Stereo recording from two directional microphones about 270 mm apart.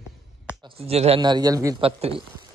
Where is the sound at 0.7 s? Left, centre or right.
Right.